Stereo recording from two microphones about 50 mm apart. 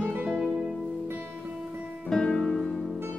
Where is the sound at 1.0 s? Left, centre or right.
Right.